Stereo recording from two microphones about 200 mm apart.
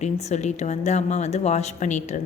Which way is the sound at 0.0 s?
35° left (ahead or behind).